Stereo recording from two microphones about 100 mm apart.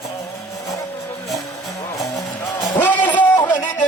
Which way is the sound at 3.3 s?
25° left (ahead or behind).